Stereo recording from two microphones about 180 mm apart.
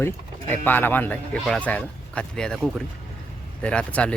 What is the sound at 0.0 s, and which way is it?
Speech, 10° left (ahead or behind).